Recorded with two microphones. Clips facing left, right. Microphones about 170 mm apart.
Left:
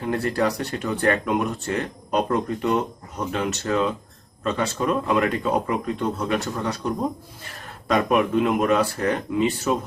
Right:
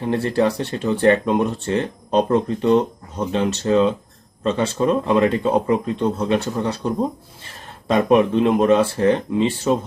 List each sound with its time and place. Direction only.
0.0 s speech: 25° right (ahead or behind)